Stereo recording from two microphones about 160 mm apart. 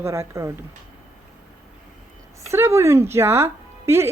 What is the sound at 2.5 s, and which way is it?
Speech, 15° right (ahead or behind).